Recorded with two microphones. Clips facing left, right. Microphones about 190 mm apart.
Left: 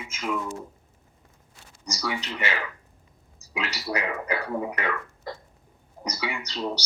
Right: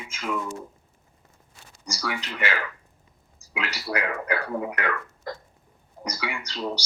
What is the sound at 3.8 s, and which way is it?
Speech, 10° left (ahead or behind).